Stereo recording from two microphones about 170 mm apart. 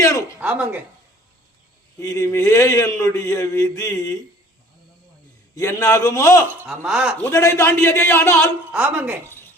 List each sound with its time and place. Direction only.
0.0 s a sound: 20° left (ahead or behind)
0.3 s speech: 5° right (ahead or behind)
2.0 s speech: 20° left (ahead or behind)
5.5 s speech: 20° left (ahead or behind)
6.6 s speech: 5° right (ahead or behind)
7.2 s a man's voice: 15° left (ahead or behind)
8.7 s speech: 10° right (ahead or behind)